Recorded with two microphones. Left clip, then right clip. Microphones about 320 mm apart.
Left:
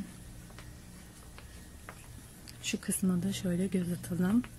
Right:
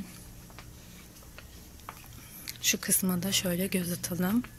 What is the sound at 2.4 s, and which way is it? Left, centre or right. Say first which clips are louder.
Speech: right 7 dB; centre.